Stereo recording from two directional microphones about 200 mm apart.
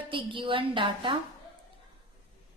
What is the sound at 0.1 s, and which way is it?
A woman's voice, 25° right (ahead or behind).